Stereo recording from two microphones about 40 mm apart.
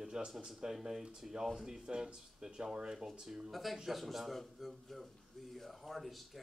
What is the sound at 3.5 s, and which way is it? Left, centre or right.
A man's voice, centre.